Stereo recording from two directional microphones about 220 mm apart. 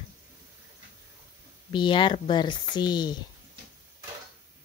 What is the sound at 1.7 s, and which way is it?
Speech, 20° left (ahead or behind).